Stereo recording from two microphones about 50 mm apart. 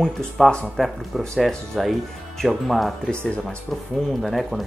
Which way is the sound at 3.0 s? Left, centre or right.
Left.